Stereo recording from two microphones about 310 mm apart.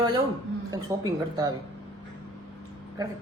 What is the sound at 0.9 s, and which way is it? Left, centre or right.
Speech, centre.